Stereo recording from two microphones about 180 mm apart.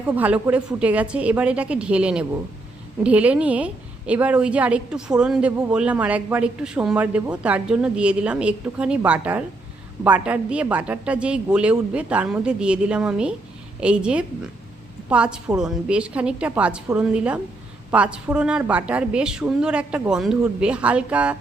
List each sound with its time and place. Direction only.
0.0 s a woman's voice: 10° right (ahead or behind)